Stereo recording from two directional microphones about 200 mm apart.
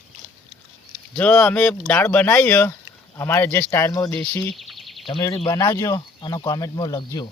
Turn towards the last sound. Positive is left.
turn(degrees=20)  # may be behind; listen again after turning